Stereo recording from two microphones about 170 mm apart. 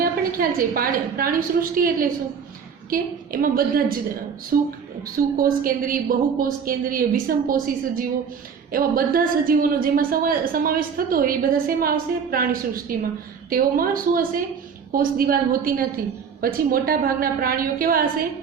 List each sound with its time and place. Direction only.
0.0 s a woman's voice: 55° right (ahead or behind)
8.7 s a woman's voice: 60° right (ahead or behind)